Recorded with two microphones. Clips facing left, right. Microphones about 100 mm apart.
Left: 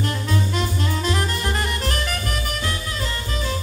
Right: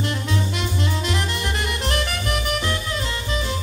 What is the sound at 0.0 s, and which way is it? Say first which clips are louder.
Saxophone: left 1 dB; 40° left (ahead or behind).